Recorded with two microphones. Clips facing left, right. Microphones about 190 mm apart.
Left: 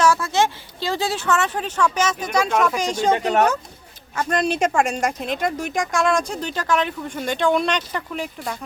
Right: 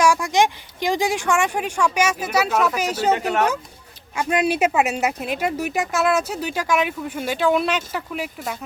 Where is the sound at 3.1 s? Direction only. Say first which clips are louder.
Left 2 dB; 35° left (ahead or behind).